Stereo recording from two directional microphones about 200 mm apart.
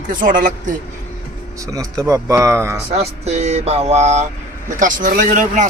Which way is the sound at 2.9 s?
30° right (ahead or behind).